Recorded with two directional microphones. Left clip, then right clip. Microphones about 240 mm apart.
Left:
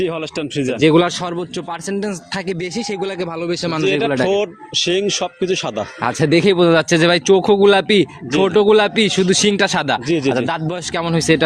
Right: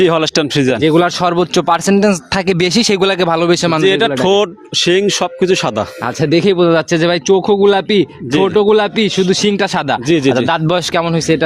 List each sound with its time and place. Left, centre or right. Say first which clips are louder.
0.0 s speech: right 10 dB; right
0.8 s speech: left 1 dB; centre
1.0 s speech: right 8 dB; right
3.8 s speech: right 3 dB; right
6.0 s speech: even; centre
10.1 s speech: right 5 dB; right
10.3 s speech: right 7 dB; right
11.0 s speech: right 2 dB; centre